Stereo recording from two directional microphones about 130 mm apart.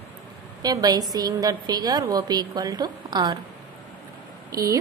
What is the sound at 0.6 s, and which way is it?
A woman's voice, 30° right (ahead or behind).